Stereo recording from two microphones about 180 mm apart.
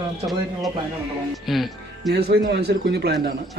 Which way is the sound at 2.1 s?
60° right (ahead or behind).